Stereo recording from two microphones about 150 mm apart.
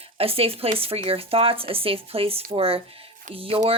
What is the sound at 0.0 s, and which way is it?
Speech, 40° right (ahead or behind).